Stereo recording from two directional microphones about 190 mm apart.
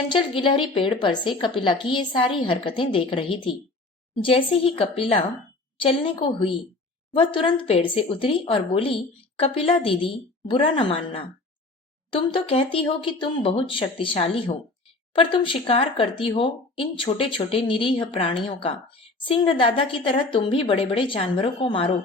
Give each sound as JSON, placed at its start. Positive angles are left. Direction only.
{"t": 0.1, "sound": "speech", "side_deg": 25}